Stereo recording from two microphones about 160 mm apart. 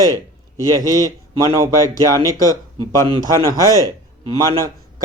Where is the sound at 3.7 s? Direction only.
20° left (ahead or behind).